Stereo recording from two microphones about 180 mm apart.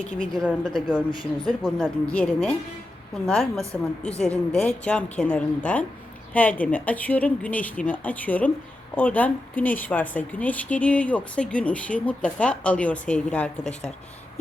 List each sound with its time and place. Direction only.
0.2 s speech: 5° left (ahead or behind)
1.2 s speech: 30° left (ahead or behind)
1.6 s speech: 5° left (ahead or behind)